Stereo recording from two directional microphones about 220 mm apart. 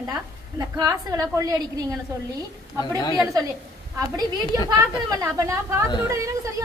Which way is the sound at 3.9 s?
15° right (ahead or behind).